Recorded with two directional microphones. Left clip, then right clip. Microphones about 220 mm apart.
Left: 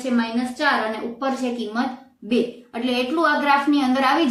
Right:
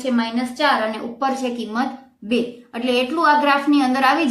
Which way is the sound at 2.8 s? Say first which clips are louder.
Right 3 dB; 35° right (ahead or behind).